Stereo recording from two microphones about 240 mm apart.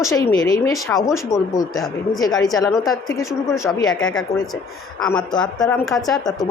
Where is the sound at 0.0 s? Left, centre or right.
Centre.